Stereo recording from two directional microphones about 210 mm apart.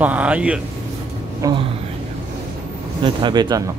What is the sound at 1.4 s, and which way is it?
Speech, 20° right (ahead or behind).